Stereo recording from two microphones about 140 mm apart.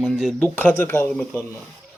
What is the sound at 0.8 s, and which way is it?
Speech, 15° left (ahead or behind).